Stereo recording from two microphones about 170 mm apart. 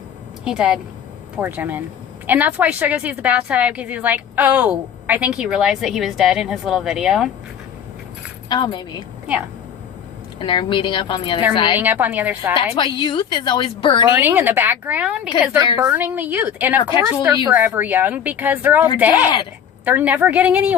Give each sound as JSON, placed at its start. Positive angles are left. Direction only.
{"t": 0.4, "sound": "a woman's voice", "side_deg": -5}
{"t": 8.4, "sound": "a woman's voice", "side_deg": 25}
{"t": 10.4, "sound": "a woman's voice", "side_deg": 30}
{"t": 11.8, "sound": "a woman's voice", "side_deg": -10}
{"t": 12.7, "sound": "a woman's voice", "side_deg": 30}
{"t": 14.2, "sound": "a woman's voice", "side_deg": -10}
{"t": 15.5, "sound": "a woman's voice", "side_deg": -20}
{"t": 15.9, "sound": "a woman's voice", "side_deg": -10}